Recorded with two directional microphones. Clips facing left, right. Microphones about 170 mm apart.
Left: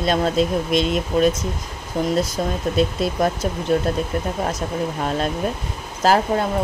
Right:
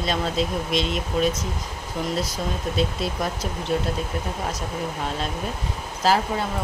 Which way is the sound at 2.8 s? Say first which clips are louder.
Left 7 dB; 50° left (ahead or behind).